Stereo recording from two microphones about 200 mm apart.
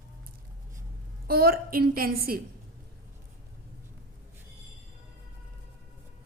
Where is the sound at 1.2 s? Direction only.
50° right (ahead or behind).